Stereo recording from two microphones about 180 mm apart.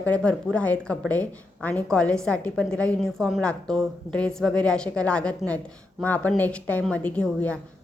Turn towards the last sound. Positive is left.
turn(degrees=5)  # may be behind; listen again after turning